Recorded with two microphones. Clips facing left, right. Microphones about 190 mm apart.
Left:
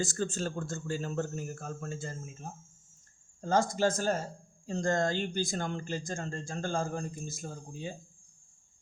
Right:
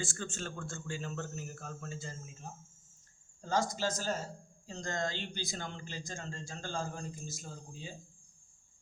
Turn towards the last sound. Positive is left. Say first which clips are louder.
# left 7 dB
turn(degrees=55)  # may be behind; listen again after turning